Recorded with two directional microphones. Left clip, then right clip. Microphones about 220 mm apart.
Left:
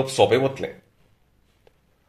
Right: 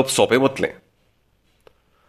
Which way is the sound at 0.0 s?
35° right (ahead or behind).